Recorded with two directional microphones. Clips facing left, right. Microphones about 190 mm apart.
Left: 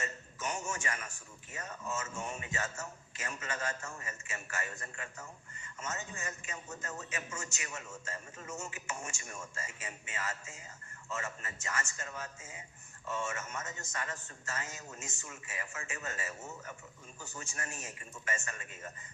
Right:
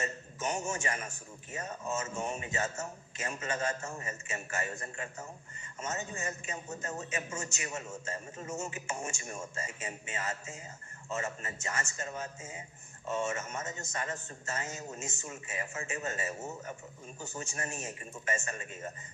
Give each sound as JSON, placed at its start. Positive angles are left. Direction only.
{"t": 0.0, "sound": "a man's voice", "side_deg": -25}